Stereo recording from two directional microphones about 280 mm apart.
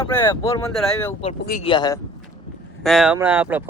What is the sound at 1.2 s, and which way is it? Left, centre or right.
Speech, left.